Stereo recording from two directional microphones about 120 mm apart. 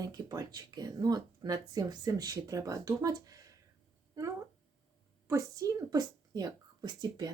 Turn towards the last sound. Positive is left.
turn(degrees=-35)  # may be behind; listen again after turning